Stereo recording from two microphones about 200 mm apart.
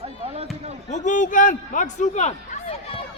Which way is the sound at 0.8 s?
35° left (ahead or behind).